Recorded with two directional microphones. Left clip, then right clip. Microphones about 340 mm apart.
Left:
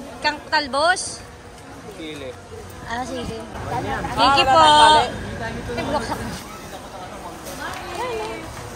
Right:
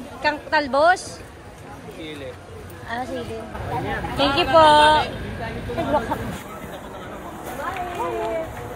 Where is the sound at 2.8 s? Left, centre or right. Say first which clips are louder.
Left 1 dB; centre.